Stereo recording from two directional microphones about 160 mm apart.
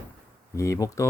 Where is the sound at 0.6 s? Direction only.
20° left (ahead or behind).